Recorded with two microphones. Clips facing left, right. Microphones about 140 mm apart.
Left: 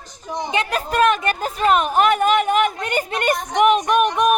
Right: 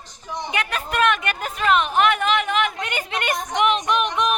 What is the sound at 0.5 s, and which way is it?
A woman's voice, 35° left (ahead or behind).